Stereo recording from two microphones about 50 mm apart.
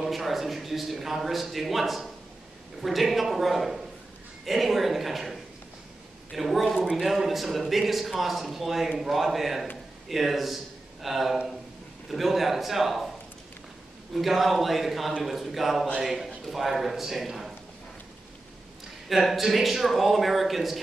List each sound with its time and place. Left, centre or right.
0.0 s a man's voice: centre
14.1 s a man's voice: centre
19.0 s a man's voice: centre